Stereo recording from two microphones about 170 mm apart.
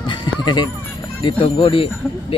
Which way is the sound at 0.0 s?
25° left (ahead or behind).